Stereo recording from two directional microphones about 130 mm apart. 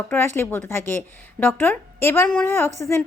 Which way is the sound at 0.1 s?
20° left (ahead or behind).